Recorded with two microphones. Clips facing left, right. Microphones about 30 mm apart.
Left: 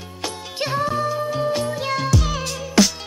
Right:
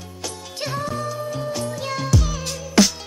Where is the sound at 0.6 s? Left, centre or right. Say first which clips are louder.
Left 5 dB; left.